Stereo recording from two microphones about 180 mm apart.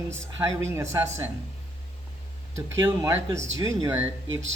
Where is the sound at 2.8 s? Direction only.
15° right (ahead or behind).